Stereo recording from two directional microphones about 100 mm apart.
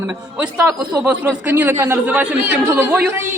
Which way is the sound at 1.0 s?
20° right (ahead or behind).